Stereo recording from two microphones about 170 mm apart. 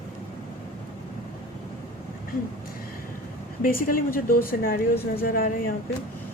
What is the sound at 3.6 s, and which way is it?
A woman's voice, 55° left (ahead or behind).